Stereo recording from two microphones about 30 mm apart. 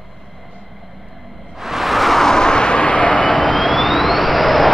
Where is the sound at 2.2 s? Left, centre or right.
Left.